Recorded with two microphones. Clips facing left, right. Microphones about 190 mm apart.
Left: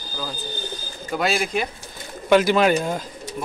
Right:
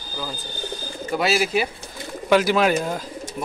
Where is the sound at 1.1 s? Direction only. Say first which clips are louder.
Right 2 dB; 5° right (ahead or behind).